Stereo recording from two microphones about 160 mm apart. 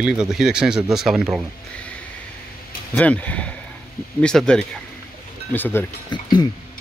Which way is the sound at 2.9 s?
10° left (ahead or behind).